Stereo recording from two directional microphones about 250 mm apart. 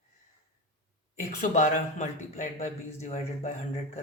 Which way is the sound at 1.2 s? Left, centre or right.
Left.